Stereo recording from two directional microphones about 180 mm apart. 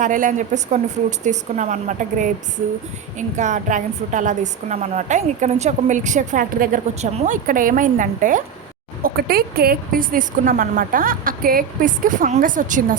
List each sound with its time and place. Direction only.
0.0 s a woman's voice: 45° right (ahead or behind)
9.0 s a woman's voice: 60° right (ahead or behind)